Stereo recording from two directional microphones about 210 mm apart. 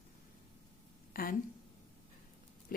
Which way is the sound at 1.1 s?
45° left (ahead or behind).